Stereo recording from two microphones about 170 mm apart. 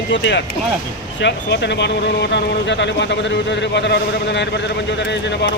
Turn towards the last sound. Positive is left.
turn(degrees=90)